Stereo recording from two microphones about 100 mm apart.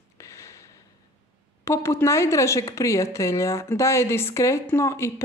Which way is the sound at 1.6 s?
30° left (ahead or behind).